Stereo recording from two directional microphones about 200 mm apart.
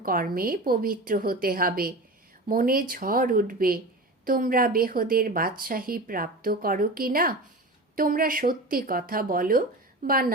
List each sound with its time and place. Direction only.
0.0 s a woman's voice: 45° right (ahead or behind)